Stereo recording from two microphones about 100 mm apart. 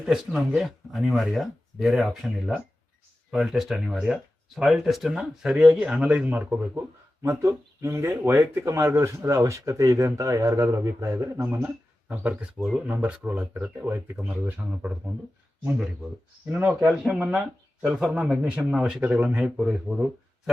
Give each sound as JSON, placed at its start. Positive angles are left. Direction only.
{"t": 0.0, "sound": "speech", "side_deg": -5}
{"t": 3.3, "sound": "speech", "side_deg": -5}
{"t": 7.2, "sound": "speech", "side_deg": -30}
{"t": 16.5, "sound": "speech", "side_deg": -20}
{"t": 16.9, "sound": "speech", "side_deg": -5}